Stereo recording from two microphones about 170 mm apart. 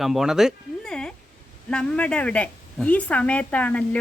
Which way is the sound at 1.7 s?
5° left (ahead or behind).